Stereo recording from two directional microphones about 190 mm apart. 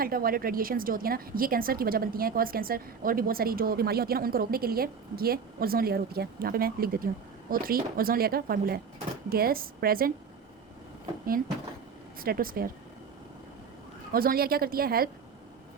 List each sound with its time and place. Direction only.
0.0 s a woman's voice: 50° right (ahead or behind)
12.2 s a woman's voice: 50° right (ahead or behind)
14.1 s a woman's voice: 50° right (ahead or behind)